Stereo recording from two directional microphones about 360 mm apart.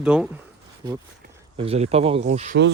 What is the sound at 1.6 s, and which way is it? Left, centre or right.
Speech, centre.